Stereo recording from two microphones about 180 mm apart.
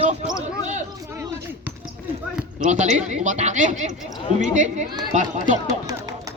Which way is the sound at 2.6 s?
40° right (ahead or behind).